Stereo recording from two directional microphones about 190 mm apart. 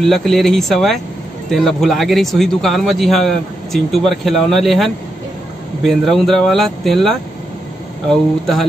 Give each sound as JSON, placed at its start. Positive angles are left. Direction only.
{"t": 0.0, "sound": "speech", "side_deg": 0}